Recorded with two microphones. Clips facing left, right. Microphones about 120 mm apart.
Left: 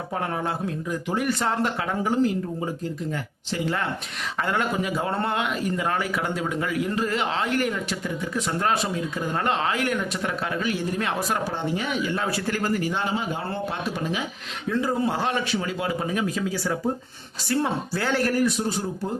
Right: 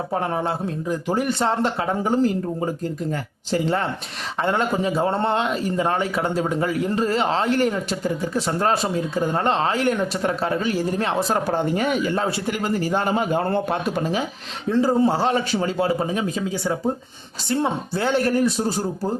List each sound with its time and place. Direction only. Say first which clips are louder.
0.1 s speech: right 3 dB; 25° right (ahead or behind)
4.4 s speech: right 5 dB; 30° right (ahead or behind)
11.3 s speech: right 5 dB; 50° right (ahead or behind)
12.1 s speech: right 4 dB; 30° right (ahead or behind)
12.5 s speech: right 1 dB; 15° right (ahead or behind)
12.7 s speech: right 4 dB; 40° right (ahead or behind)
14.0 s speech: right 4 dB; 35° right (ahead or behind)